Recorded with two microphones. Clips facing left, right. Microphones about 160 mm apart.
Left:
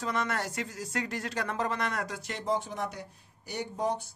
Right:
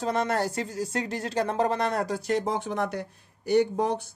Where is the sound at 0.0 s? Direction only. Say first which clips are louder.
Right 6 dB; 35° right (ahead or behind).